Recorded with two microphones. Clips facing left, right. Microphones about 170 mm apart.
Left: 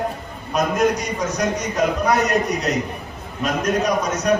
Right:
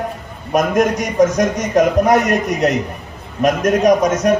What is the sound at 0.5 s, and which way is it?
A man's voice, 50° right (ahead or behind).